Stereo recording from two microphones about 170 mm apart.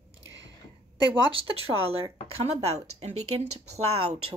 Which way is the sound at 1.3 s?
35° right (ahead or behind).